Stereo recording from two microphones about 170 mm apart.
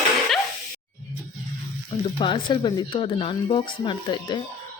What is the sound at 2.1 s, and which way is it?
Speech, 30° left (ahead or behind).